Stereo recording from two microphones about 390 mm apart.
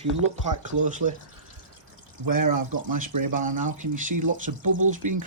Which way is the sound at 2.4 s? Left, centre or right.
Right.